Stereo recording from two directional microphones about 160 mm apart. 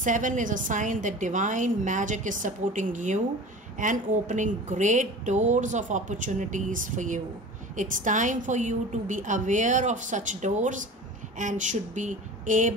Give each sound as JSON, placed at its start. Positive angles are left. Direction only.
{"t": 0.0, "sound": "a woman's voice", "side_deg": -55}